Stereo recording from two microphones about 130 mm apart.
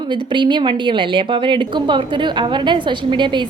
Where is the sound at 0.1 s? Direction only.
35° right (ahead or behind).